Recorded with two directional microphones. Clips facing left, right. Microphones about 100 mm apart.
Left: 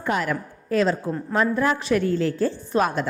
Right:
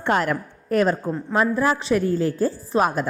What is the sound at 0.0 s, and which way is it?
Speech, 65° right (ahead or behind).